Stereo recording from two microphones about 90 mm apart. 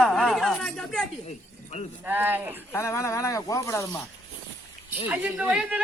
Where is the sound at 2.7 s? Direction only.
30° left (ahead or behind).